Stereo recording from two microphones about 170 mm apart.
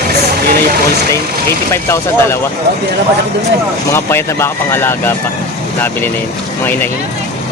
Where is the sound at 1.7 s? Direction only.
15° left (ahead or behind).